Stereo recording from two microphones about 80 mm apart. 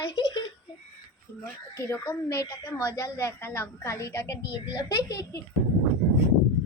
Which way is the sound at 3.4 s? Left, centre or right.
Left.